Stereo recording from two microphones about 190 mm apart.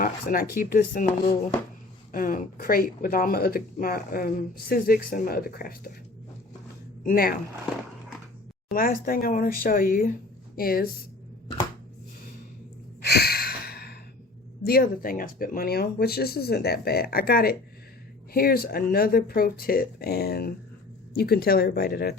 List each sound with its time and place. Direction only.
0.0 s speech: 45° left (ahead or behind)
2.1 s speech: 45° left (ahead or behind)
7.0 s speech: 50° left (ahead or behind)
8.7 s speech: 50° left (ahead or behind)
13.0 s a sound: 55° left (ahead or behind)
14.6 s speech: 50° left (ahead or behind)